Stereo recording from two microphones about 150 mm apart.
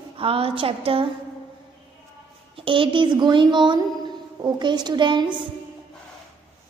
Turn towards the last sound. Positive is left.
turn(degrees=-30)  # may be behind; listen again after turning